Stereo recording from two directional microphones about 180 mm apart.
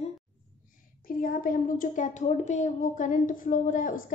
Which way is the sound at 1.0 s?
50° left (ahead or behind).